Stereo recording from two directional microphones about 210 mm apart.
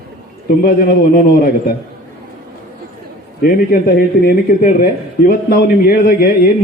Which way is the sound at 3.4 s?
45° left (ahead or behind).